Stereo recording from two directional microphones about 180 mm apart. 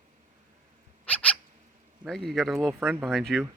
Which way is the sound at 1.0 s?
10° left (ahead or behind).